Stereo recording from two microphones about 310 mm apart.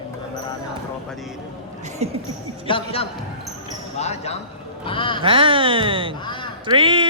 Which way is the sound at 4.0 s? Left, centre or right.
Left.